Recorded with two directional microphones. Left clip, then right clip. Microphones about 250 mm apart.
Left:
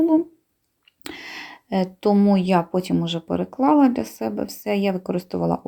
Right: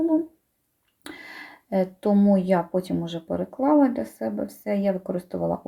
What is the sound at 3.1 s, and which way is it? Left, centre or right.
Speech, left.